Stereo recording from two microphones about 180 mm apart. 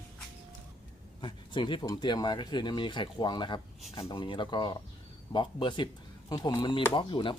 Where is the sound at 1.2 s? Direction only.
25° left (ahead or behind).